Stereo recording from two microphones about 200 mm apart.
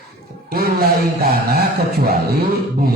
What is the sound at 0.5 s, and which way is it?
Speech, 50° right (ahead or behind).